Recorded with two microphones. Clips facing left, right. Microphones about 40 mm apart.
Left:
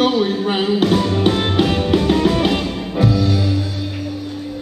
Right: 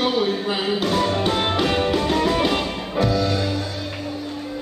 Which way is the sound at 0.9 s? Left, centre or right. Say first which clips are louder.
Left 4 dB; centre.